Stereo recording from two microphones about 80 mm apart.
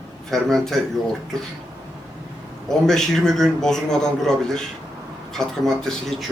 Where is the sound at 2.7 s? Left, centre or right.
Centre.